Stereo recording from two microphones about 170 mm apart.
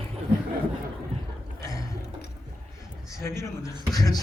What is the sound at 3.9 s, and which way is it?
Beatboxing, 20° left (ahead or behind).